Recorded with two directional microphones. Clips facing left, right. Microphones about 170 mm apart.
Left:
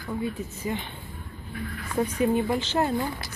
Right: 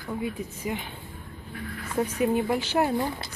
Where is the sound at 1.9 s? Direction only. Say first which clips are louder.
Left 1 dB; 5° right (ahead or behind).